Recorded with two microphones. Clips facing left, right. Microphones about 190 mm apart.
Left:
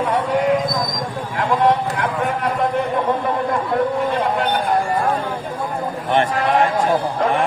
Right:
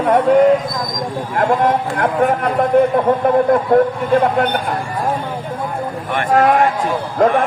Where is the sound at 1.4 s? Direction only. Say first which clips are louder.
Right 2 dB; 50° right (ahead or behind).